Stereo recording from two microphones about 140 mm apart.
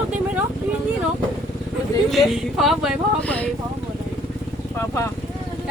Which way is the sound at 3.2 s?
10° left (ahead or behind).